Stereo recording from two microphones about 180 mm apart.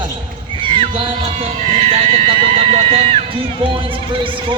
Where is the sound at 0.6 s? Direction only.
30° right (ahead or behind).